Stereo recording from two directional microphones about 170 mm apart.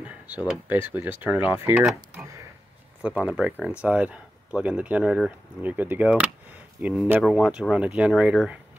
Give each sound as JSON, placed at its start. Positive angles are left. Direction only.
{"t": 0.5, "sound": "speech", "side_deg": -10}
{"t": 2.1, "sound": "a sound", "side_deg": -15}
{"t": 3.0, "sound": "speech", "side_deg": -10}